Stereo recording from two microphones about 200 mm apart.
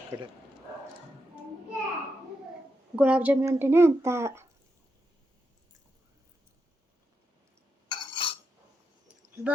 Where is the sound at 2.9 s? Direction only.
5° right (ahead or behind).